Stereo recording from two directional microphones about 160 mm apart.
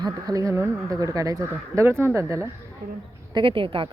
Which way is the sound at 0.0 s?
20° right (ahead or behind).